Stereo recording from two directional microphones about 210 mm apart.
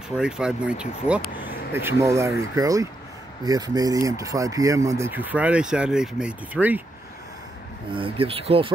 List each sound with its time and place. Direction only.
0.1 s speech: 5° right (ahead or behind)
7.9 s speech: 25° right (ahead or behind)